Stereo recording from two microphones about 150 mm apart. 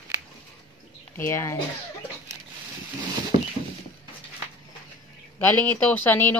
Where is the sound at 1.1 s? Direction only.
15° left (ahead or behind).